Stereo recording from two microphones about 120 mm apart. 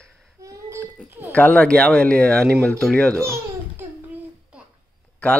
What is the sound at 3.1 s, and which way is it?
Babbling, 25° right (ahead or behind).